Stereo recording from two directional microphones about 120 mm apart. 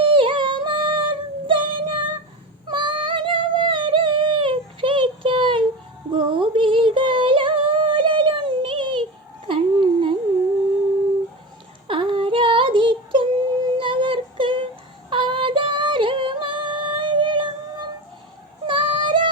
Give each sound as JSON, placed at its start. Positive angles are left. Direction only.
{"t": 0.0, "sound": "yodeling", "side_deg": -45}
{"t": 2.6, "sound": "a sound", "side_deg": -45}
{"t": 6.1, "sound": "music", "side_deg": -45}
{"t": 9.5, "sound": "a sound", "side_deg": -45}
{"t": 11.9, "sound": "female singing", "side_deg": -45}
{"t": 15.1, "sound": "yodeling", "side_deg": -45}
{"t": 18.6, "sound": "female singing", "side_deg": -45}